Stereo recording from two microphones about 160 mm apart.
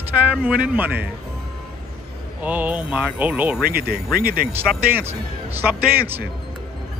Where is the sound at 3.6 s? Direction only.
75° right (ahead or behind).